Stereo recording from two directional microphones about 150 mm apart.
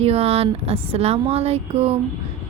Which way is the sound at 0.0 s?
40° right (ahead or behind).